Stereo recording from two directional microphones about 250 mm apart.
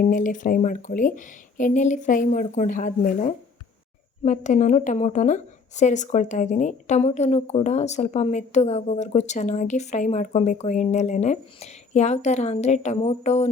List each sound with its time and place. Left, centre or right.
0.0 s a woman's voice: left